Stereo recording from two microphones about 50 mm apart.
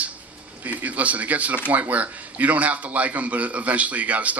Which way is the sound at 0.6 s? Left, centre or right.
Right.